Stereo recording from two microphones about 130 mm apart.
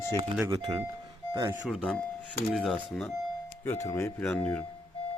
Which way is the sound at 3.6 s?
20° left (ahead or behind).